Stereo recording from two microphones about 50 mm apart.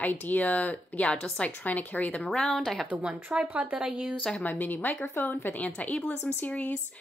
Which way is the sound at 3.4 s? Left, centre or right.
Right.